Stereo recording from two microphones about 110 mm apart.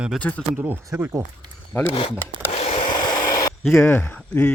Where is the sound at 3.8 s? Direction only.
20° left (ahead or behind).